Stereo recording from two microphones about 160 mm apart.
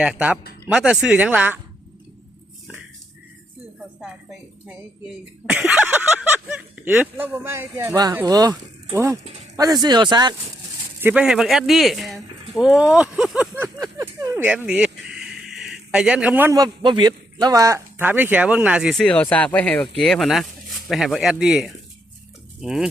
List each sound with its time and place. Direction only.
0.0 s speech: 5° right (ahead or behind)
5.0 s speech: 5° right (ahead or behind); by 10.3 s 25° right (ahead or behind)
11.0 s speech: 5° right (ahead or behind)
14.0 s a sound: 20° right (ahead or behind)
16.6 s speech: 25° right (ahead or behind); by 19.0 s 5° right (ahead or behind)
19.0 s speech: 10° left (ahead or behind)